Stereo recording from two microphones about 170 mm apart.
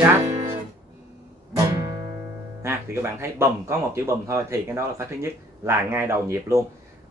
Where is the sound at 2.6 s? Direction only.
15° right (ahead or behind).